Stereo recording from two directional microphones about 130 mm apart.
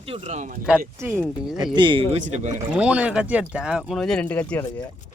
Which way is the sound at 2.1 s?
65° right (ahead or behind).